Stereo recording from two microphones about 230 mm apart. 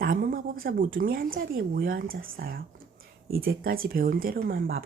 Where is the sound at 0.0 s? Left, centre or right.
Right.